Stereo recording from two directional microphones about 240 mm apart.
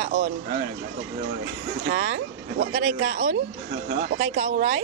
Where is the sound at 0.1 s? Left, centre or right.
Right.